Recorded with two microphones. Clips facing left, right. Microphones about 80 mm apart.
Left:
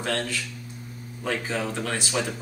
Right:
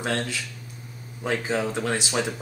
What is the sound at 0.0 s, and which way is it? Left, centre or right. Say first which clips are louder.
Speech: even; centre.